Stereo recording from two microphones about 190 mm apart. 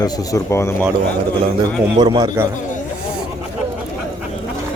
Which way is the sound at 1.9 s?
25° right (ahead or behind).